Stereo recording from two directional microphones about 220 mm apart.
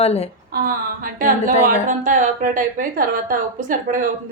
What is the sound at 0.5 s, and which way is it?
A woman's voice, 40° right (ahead or behind).